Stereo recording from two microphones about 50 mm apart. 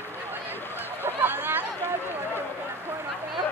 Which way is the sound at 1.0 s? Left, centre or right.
Right.